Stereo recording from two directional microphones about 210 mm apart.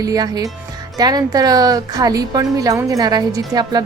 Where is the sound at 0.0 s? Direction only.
20° right (ahead or behind).